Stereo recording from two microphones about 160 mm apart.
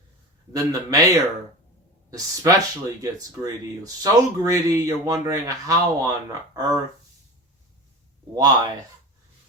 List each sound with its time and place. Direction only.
0.5 s speech: 20° right (ahead or behind)
8.4 s speech: 25° right (ahead or behind)